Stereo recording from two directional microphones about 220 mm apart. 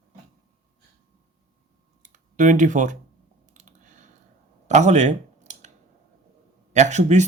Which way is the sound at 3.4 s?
35° right (ahead or behind).